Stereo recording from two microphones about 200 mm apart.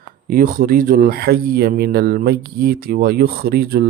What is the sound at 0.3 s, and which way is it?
Speech, 45° right (ahead or behind).